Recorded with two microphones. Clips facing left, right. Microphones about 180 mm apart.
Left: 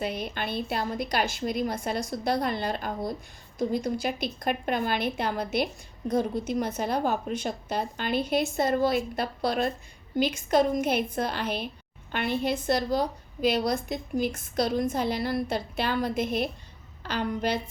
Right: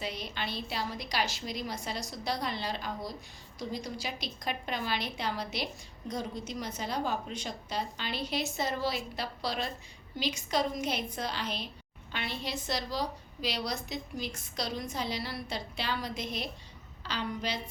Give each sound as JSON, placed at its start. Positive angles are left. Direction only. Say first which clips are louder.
{"t": 0.0, "sound": "a woman's voice", "louder": "left 6 dB", "side_deg": 55}